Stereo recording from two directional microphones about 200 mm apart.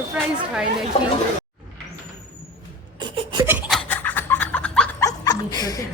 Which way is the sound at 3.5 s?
Centre (ahead or behind).